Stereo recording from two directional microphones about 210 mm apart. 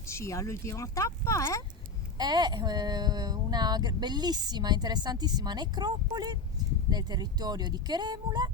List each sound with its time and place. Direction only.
0.1 s speech: 15° left (ahead or behind)
2.1 s speech: 20° right (ahead or behind)